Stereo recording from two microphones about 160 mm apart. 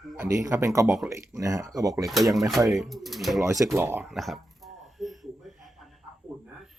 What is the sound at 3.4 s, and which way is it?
Speech, 20° right (ahead or behind).